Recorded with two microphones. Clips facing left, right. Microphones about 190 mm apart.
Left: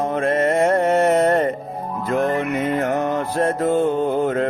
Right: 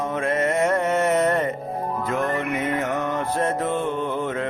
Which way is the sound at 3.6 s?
35° left (ahead or behind).